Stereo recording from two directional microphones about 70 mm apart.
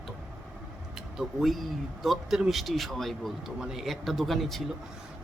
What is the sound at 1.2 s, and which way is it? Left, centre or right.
Speech, centre.